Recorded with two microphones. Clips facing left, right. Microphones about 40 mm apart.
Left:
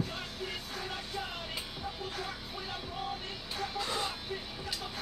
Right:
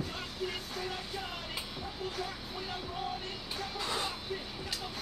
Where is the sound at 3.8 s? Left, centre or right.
Centre.